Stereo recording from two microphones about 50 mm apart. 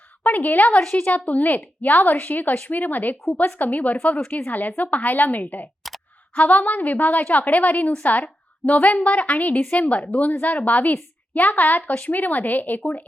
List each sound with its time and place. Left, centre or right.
0.2 s a woman's voice: left
5.8 s a sound: centre
6.3 s a woman's voice: left